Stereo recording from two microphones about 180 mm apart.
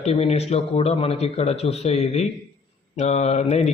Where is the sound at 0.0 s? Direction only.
35° left (ahead or behind).